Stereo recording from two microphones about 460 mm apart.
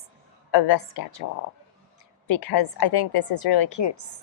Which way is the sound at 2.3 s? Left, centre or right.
Left.